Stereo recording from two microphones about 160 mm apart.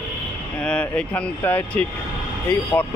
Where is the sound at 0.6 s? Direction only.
5° left (ahead or behind).